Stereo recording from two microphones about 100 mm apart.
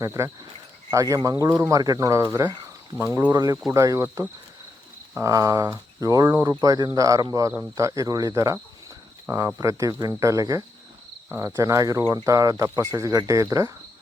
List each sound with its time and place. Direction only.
0.0 s speech: 30° right (ahead or behind)
3.0 s speech: 25° right (ahead or behind)
3.3 s speech: 35° right (ahead or behind)